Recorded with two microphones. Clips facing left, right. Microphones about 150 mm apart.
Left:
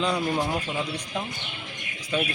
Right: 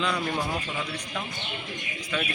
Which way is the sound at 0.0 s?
30° left (ahead or behind).